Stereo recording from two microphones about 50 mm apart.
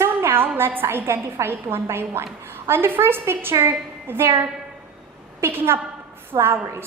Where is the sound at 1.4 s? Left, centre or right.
Right.